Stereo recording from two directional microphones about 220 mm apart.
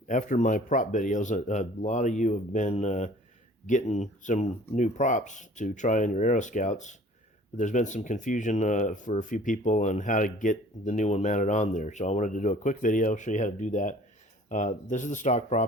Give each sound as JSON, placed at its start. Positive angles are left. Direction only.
{"t": 0.1, "sound": "speech", "side_deg": 35}